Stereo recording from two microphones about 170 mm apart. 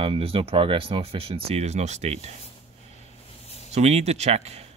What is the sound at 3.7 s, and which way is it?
Speech, 40° right (ahead or behind).